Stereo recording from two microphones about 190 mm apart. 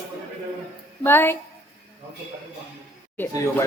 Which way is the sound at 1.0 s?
10° left (ahead or behind).